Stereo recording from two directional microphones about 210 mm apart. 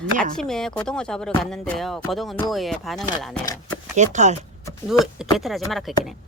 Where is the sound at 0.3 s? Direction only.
5° left (ahead or behind).